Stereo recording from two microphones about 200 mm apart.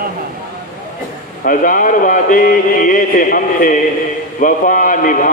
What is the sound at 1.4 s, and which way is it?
Speech, 40° left (ahead or behind).